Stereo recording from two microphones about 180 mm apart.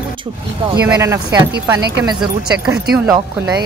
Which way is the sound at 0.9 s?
20° right (ahead or behind).